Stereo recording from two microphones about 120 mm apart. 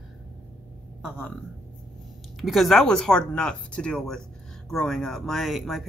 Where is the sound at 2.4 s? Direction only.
Centre (ahead or behind).